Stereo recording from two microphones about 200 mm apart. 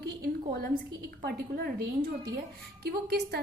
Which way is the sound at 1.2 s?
50° right (ahead or behind).